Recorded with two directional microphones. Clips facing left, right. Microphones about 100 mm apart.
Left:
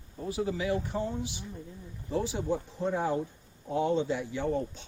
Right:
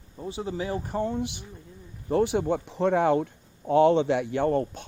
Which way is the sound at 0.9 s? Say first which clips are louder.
Right 5 dB; 60° right (ahead or behind).